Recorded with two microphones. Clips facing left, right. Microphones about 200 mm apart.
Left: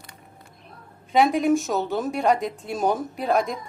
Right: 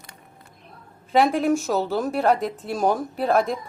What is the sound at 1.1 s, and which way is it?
Speech, centre (ahead or behind).